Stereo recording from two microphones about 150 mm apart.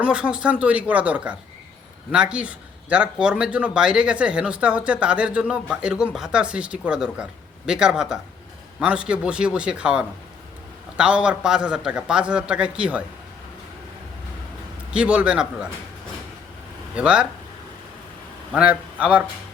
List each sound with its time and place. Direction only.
0.0 s speech: 5° right (ahead or behind)
14.9 s speech: 5° right (ahead or behind)
16.9 s speech: 5° right (ahead or behind)
18.5 s a man's voice: 10° right (ahead or behind)